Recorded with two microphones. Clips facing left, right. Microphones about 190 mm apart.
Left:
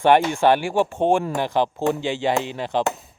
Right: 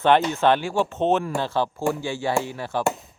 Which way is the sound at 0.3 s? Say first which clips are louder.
Left 2 dB; 10° left (ahead or behind).